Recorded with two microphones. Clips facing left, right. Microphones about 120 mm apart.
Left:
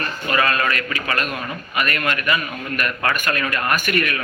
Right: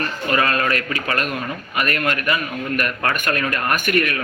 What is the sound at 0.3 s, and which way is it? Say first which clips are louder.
A man's voice: right 1 dB; 35° right (ahead or behind).